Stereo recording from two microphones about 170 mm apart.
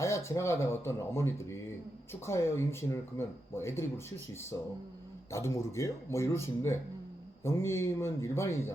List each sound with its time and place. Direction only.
0.0 s speech: 15° left (ahead or behind)